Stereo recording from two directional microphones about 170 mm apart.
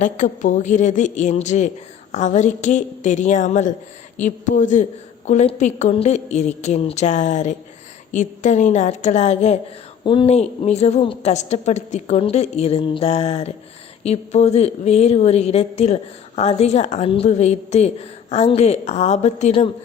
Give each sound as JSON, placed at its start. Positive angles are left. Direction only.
{"t": 0.0, "sound": "a woman's voice", "side_deg": 50}
{"t": 10.0, "sound": "a woman's voice", "side_deg": 30}